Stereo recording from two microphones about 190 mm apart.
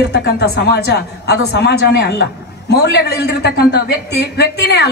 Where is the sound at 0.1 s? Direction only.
60° left (ahead or behind).